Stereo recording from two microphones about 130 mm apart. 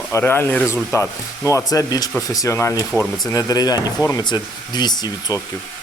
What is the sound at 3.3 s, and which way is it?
Speech, 30° left (ahead or behind).